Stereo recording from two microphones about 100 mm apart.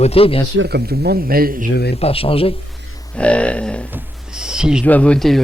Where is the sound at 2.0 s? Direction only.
75° left (ahead or behind).